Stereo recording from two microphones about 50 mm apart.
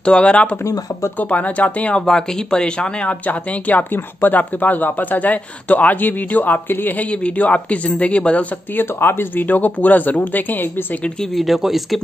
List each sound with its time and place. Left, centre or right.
0.0 s speech: left
2.0 s speech: centre
3.3 s speech: left
7.1 s speech: left
8.7 s speech: left
11.3 s speech: centre